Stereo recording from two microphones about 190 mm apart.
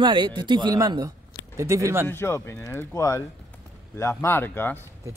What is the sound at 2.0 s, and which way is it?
Speech, 10° left (ahead or behind).